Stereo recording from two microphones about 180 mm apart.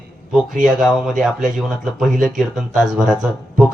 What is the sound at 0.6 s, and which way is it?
Speech, centre (ahead or behind).